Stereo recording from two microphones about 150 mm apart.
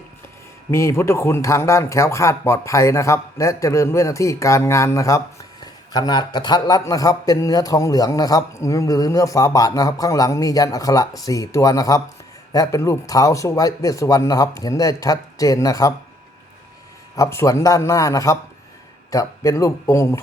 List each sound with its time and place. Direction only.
0.7 s speech: 20° left (ahead or behind)
17.2 s speech: 20° left (ahead or behind)